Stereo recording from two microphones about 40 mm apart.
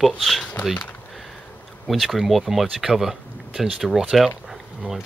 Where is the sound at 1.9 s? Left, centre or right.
Centre.